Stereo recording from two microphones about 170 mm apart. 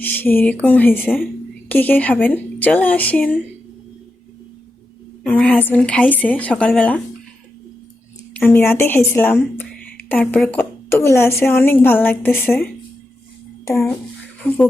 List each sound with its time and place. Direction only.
0.0 s speech: 10° left (ahead or behind)
5.2 s speech: 5° left (ahead or behind)
8.3 s speech: 10° left (ahead or behind)
13.7 s speech: 15° left (ahead or behind)